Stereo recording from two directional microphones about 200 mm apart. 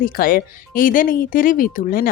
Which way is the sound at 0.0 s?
45° left (ahead or behind).